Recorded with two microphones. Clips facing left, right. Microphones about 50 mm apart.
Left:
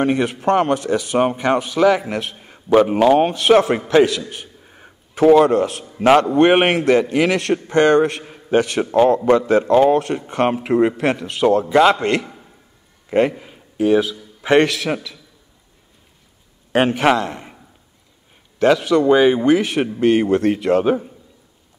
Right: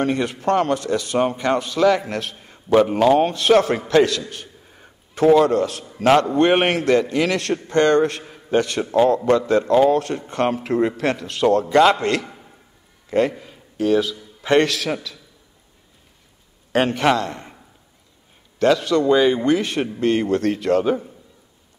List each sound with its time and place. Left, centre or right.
0.0 s a man's voice: centre
13.4 s a sound: centre
14.4 s speech: centre
16.7 s speech: centre
18.6 s speech: centre